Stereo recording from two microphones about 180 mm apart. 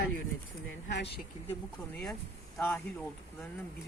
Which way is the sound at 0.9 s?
70° left (ahead or behind).